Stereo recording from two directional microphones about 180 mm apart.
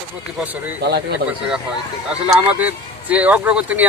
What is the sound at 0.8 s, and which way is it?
Speech, 60° right (ahead or behind).